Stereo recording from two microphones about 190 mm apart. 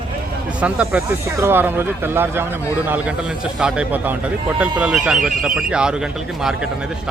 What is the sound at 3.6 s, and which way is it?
Speech, 5° right (ahead or behind).